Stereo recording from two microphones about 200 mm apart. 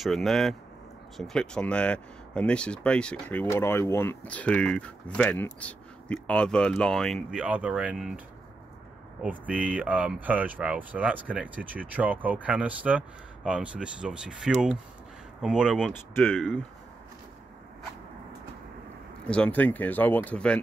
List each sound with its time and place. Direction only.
0.0 s speech: centre (ahead or behind)
9.2 s speech: 5° right (ahead or behind)
15.9 s speech: 10° left (ahead or behind)
19.2 s speech: 5° left (ahead or behind)